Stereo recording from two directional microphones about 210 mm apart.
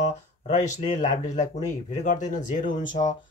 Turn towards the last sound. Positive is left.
turn(degrees=40)  # may be behind; listen again after turning